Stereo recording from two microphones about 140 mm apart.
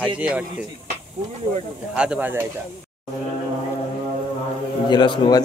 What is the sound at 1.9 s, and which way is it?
Speech, 5° right (ahead or behind).